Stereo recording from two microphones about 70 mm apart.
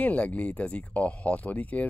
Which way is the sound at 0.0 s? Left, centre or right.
Centre.